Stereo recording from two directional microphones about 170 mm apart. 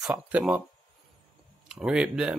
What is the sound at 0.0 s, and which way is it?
Speech, 5° right (ahead or behind).